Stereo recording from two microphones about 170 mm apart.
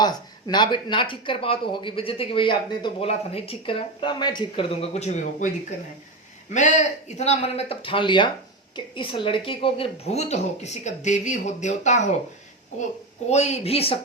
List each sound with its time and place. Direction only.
0.0 s speech: 25° left (ahead or behind); by 5.5 s 45° left (ahead or behind)
6.5 s speech: 45° left (ahead or behind)
13.2 s speech: 40° left (ahead or behind)